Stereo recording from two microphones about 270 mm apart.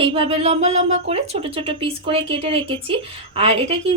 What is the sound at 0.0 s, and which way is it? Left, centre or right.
Speech, right.